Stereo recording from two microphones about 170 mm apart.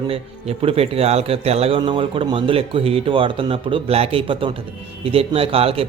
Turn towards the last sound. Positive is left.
turn(degrees=-35)  # may be behind; listen again after turning